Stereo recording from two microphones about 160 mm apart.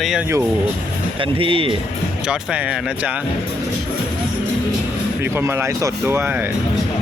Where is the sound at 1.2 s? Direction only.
35° right (ahead or behind).